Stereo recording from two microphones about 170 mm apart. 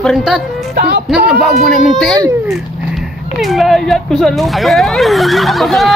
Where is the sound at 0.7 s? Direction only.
70° right (ahead or behind).